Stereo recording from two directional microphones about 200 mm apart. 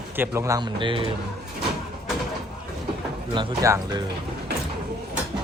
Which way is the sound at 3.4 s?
20° right (ahead or behind).